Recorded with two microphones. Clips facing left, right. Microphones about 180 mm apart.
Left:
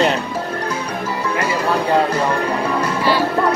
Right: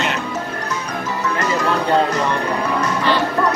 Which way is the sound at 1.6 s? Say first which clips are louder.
Left 1 dB; 30° left (ahead or behind).